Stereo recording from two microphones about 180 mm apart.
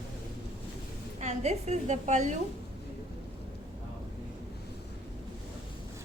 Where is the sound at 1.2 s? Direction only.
40° right (ahead or behind).